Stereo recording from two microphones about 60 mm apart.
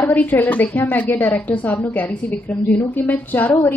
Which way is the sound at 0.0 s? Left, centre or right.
Left.